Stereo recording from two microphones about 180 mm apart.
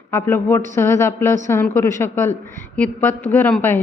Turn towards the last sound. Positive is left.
turn(degrees=10)  # may be behind; listen again after turning